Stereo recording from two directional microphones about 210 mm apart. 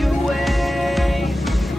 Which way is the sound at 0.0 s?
Centre (ahead or behind).